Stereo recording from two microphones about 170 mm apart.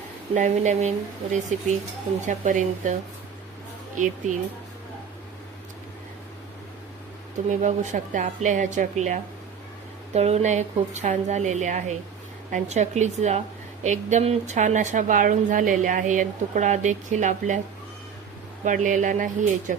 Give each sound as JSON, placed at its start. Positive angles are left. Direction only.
{"t": 0.3, "sound": "speech", "side_deg": -45}
{"t": 4.0, "sound": "speech", "side_deg": -50}
{"t": 7.3, "sound": "speech", "side_deg": -45}
{"t": 18.6, "sound": "speech", "side_deg": -50}